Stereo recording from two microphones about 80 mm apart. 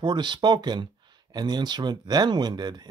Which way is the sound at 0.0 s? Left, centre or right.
Right.